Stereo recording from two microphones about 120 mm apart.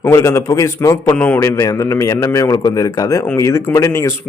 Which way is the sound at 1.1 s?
15° left (ahead or behind).